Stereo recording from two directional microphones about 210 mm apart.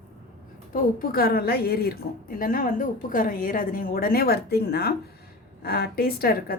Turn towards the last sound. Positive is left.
turn(degrees=45)  # may be behind; listen again after turning